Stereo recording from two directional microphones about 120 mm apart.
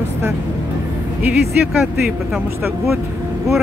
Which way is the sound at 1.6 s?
15° right (ahead or behind).